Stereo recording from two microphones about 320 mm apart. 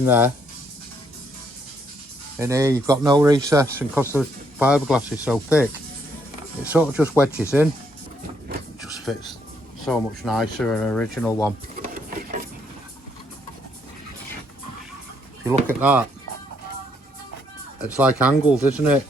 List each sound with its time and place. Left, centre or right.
0.0 s speech: centre
2.4 s speech: centre
6.7 s speech: centre
9.1 s speech: centre
11.8 s a sound: right
15.8 s speech: centre
17.7 s speech: centre